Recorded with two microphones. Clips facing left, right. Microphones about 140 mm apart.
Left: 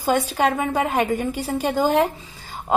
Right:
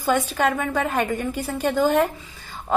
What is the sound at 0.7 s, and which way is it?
Speech, 15° left (ahead or behind).